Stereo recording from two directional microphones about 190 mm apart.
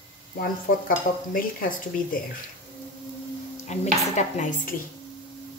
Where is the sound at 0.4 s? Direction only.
50° left (ahead or behind).